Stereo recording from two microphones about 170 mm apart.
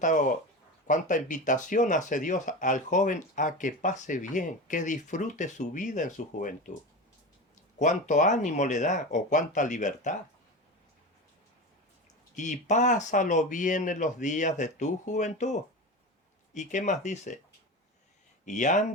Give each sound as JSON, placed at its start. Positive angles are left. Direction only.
{"t": 0.0, "sound": "speech", "side_deg": 50}
{"t": 7.8, "sound": "speech", "side_deg": 45}
{"t": 12.3, "sound": "speech", "side_deg": 45}
{"t": 16.6, "sound": "speech", "side_deg": 45}
{"t": 18.4, "sound": "speech", "side_deg": 45}